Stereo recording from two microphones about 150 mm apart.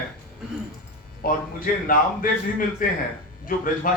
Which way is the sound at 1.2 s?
75° left (ahead or behind).